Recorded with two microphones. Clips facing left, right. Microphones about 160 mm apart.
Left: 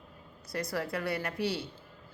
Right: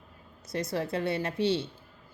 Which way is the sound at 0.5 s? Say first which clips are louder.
Right 3 dB; 25° right (ahead or behind).